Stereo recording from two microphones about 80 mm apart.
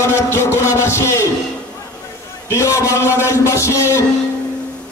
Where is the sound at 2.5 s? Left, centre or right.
Left.